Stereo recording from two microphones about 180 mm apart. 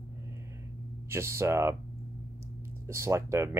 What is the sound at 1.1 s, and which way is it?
Speech, 15° right (ahead or behind).